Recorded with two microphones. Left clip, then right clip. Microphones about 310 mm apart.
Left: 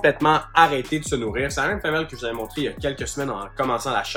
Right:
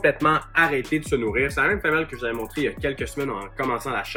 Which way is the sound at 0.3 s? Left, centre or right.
Centre.